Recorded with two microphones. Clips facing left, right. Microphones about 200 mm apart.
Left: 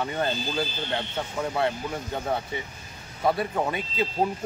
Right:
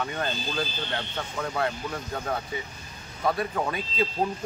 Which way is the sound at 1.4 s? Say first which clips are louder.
Left 2 dB; 25° left (ahead or behind).